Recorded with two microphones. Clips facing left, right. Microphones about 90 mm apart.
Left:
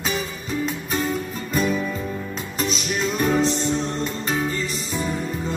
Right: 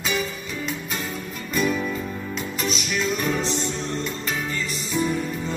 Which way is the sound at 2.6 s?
35° left (ahead or behind).